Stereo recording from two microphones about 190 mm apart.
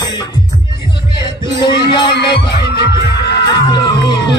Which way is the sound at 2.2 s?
60° left (ahead or behind).